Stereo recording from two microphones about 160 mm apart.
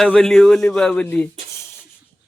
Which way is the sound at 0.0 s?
5° left (ahead or behind).